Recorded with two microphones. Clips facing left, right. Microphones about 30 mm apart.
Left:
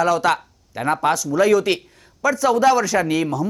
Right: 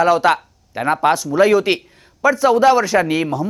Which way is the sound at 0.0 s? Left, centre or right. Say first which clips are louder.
Right 4 dB; right.